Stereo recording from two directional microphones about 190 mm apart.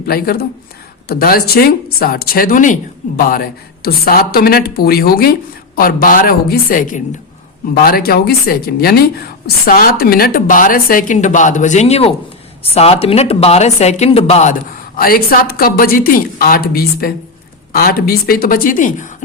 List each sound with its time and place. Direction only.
0.1 s speech: 50° left (ahead or behind); by 14.5 s 35° left (ahead or behind)
14.9 s speech: 50° left (ahead or behind)